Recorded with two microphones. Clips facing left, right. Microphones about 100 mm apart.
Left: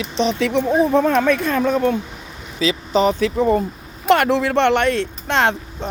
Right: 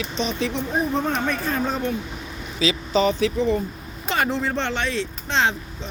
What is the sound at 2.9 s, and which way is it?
Speech, 45° left (ahead or behind).